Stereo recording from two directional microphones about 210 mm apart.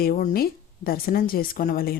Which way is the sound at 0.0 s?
40° left (ahead or behind).